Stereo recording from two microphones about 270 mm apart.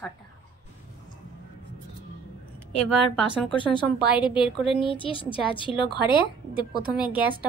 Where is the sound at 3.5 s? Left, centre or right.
Centre.